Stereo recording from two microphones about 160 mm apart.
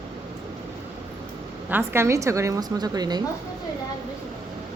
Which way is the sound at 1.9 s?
20° right (ahead or behind).